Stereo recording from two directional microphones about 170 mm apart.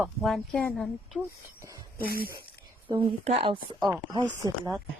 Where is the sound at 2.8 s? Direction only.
30° right (ahead or behind).